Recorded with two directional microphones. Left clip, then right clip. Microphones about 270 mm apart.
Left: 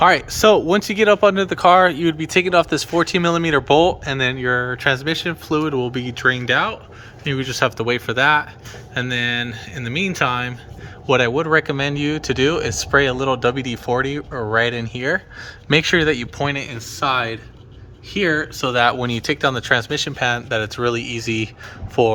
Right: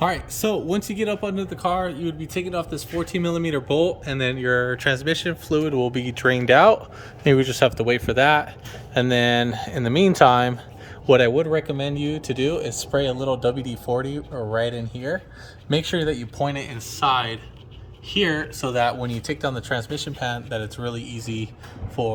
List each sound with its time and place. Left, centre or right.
0.0 s speech: centre
12.5 s speech: left
18.3 s speech: centre
18.9 s speech: left
21.0 s speech: centre